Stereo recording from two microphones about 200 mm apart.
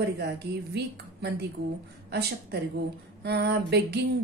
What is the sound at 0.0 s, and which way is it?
A woman's voice, 55° right (ahead or behind).